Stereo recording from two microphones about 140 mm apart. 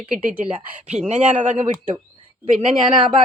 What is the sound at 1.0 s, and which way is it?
Speech, 55° right (ahead or behind).